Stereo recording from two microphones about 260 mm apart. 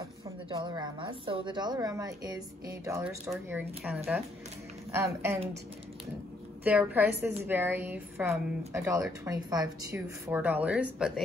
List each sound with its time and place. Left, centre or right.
0.0 s a woman's voice: centre
6.6 s a woman's voice: centre